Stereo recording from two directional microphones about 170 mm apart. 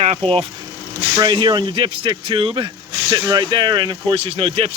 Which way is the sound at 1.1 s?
25° right (ahead or behind).